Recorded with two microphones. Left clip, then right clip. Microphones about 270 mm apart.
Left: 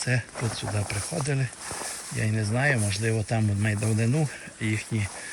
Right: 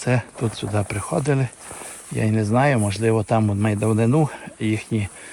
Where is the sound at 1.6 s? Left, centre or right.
Centre.